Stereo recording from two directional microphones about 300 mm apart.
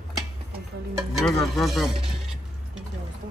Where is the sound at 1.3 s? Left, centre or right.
Centre.